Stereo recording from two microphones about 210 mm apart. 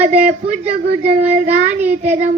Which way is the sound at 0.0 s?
5° right (ahead or behind).